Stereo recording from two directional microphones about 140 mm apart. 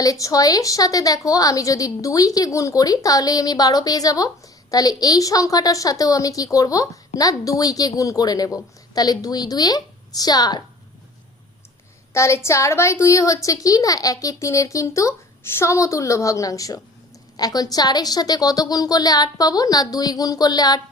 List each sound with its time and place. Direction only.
0.0 s a woman's voice: 25° left (ahead or behind)
12.1 s a woman's voice: 20° left (ahead or behind)